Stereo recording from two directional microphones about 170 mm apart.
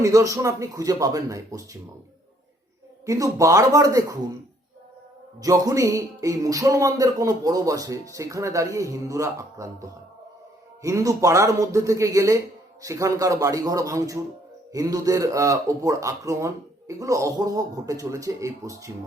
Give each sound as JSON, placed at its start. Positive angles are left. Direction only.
{"t": 0.0, "sound": "speech", "side_deg": -20}
{"t": 3.1, "sound": "speech", "side_deg": -20}
{"t": 5.4, "sound": "speech", "side_deg": -20}